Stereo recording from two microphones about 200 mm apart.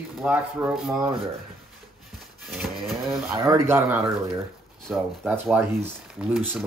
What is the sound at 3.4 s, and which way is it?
Speech, 15° right (ahead or behind).